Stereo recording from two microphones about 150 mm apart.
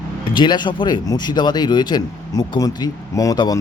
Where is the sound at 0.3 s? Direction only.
30° left (ahead or behind).